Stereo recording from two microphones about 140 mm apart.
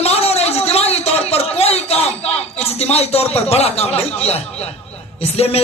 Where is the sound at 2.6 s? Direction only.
50° left (ahead or behind).